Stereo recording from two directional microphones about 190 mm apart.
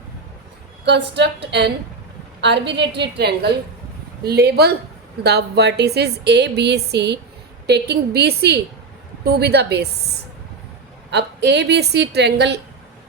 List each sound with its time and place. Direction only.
0.9 s a woman's voice: 65° right (ahead or behind)